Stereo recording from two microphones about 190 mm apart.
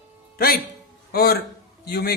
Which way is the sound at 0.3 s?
50° left (ahead or behind).